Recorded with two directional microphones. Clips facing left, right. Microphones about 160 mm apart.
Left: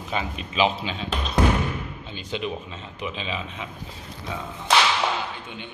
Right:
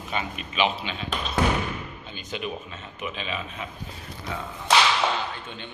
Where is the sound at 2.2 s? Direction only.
25° left (ahead or behind).